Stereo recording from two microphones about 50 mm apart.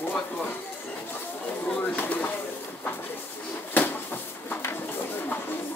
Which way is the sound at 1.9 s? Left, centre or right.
Left.